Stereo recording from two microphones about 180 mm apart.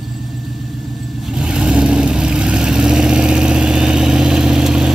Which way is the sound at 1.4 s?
5° right (ahead or behind).